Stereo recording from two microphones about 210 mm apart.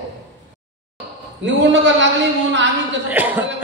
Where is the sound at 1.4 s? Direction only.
60° right (ahead or behind).